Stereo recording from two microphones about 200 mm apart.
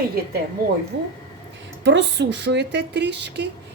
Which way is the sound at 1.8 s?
60° right (ahead or behind).